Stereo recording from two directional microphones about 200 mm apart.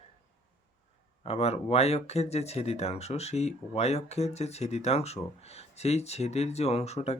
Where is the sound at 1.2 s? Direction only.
30° left (ahead or behind).